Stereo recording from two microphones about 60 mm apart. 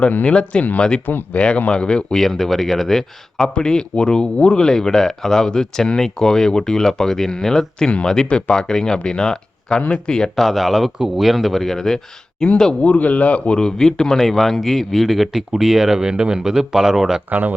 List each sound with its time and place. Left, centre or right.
0.0 s speech: left
1.0 s speech: left
2.2 s speech: centre
10.4 s a man's voice: centre
12.8 s a man's voice: left; by 17.2 s centre